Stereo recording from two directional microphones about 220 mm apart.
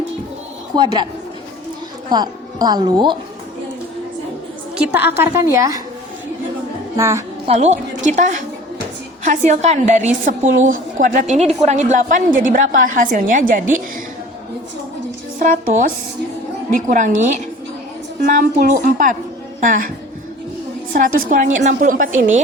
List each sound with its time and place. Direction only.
0.7 s a woman's voice: 20° right (ahead or behind)
2.0 s speech: 20° right (ahead or behind)
4.9 s a woman's voice: 10° right (ahead or behind)
6.9 s a woman's voice: 15° right (ahead or behind)
7.4 s a woman's voice: 30° right (ahead or behind)
15.4 s a woman's voice: 40° right (ahead or behind)
20.9 s a woman's voice: 40° right (ahead or behind)